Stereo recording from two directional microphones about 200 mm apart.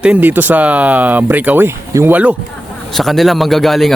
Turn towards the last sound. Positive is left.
turn(degrees=0)  # may be behind; listen again after turning